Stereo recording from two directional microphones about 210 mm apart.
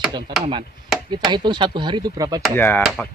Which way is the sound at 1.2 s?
20° right (ahead or behind).